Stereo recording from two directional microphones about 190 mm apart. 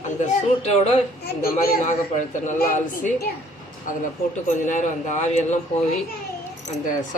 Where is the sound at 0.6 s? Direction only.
35° left (ahead or behind).